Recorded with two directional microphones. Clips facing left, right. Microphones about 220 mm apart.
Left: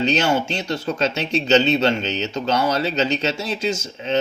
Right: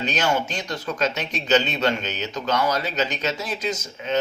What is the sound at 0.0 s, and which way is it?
Speech, 25° left (ahead or behind).